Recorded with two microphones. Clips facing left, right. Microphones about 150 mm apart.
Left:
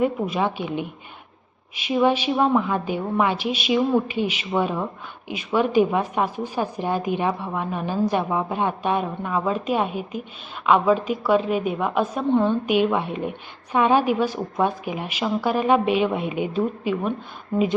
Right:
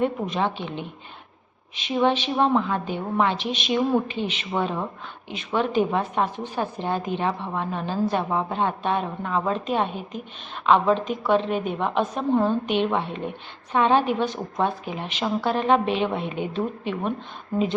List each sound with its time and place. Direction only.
0.0 s a woman's voice: 10° left (ahead or behind)
12.3 s a woman's voice: 5° right (ahead or behind)
12.6 s a woman's voice: 10° left (ahead or behind)